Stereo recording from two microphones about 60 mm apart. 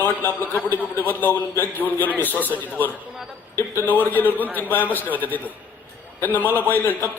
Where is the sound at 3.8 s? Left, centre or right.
Left.